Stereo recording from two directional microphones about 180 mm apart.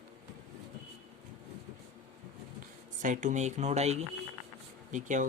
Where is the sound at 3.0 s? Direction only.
45° right (ahead or behind).